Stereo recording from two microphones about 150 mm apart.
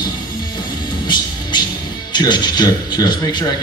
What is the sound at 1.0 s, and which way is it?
Music, 30° left (ahead or behind).